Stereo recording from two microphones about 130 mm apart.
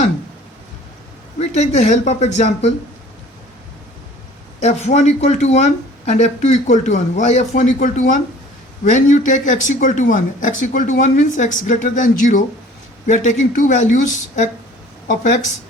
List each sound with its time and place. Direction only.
1.4 s speech: 55° left (ahead or behind)
4.6 s speech: 60° left (ahead or behind); by 8.2 s 85° left
8.8 s speech: 70° left (ahead or behind); by 12.4 s 85° left
13.1 s speech: 70° left (ahead or behind)